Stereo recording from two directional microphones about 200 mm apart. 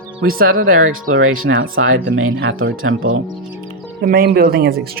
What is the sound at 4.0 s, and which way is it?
Speech, 50° right (ahead or behind).